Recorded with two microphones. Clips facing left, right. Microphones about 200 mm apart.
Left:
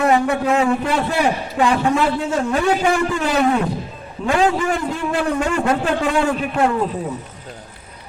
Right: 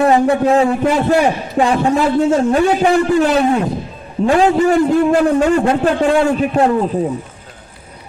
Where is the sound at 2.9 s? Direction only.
35° right (ahead or behind).